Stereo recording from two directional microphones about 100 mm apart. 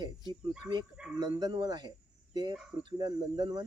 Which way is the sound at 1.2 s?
45° right (ahead or behind).